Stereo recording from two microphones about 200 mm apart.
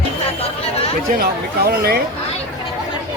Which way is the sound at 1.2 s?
50° right (ahead or behind).